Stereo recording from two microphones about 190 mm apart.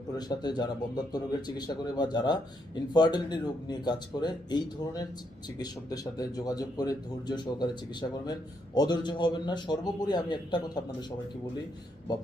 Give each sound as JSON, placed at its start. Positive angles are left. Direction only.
{"t": 0.2, "sound": "a man's voice", "side_deg": 20}